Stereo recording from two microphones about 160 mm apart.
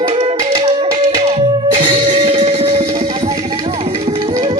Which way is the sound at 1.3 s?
35° right (ahead or behind).